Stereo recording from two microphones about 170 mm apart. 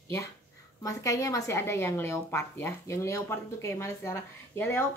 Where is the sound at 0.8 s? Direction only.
20° left (ahead or behind).